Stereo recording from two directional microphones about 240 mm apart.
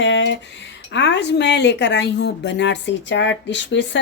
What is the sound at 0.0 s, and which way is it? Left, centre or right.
A woman's voice, left.